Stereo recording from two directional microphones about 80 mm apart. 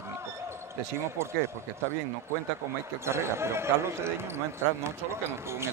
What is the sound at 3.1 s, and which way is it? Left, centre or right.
Speech, right.